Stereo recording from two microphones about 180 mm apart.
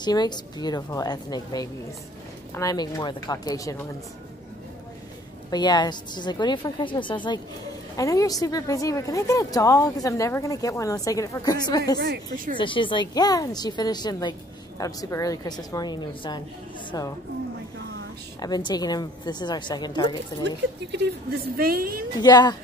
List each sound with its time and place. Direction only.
0.0 s a woman's voice: 25° left (ahead or behind)
5.5 s a woman's voice: 25° left (ahead or behind)
18.4 s a woman's voice: 20° left (ahead or behind)
20.4 s speech: 70° right (ahead or behind)
21.5 s a woman's voice: 55° right (ahead or behind)
22.2 s a woman's voice: 25° left (ahead or behind)